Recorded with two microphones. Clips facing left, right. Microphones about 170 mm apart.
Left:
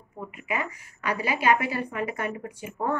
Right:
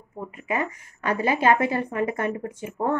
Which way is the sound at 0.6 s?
20° right (ahead or behind).